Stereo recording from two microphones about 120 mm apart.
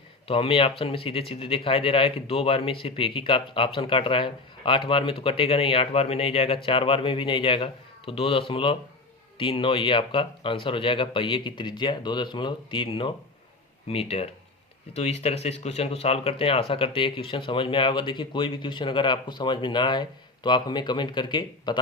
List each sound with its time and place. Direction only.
0.3 s speech: 50° left (ahead or behind)